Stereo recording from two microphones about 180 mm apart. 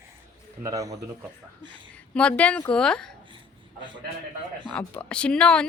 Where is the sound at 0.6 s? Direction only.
20° right (ahead or behind).